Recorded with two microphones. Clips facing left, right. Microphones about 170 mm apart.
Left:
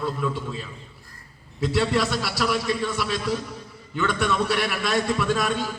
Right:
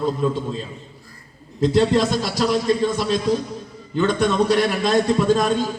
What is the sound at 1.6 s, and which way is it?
A man's voice, 40° right (ahead or behind).